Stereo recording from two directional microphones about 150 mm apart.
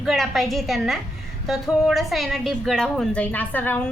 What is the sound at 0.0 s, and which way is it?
A woman's voice, centre (ahead or behind).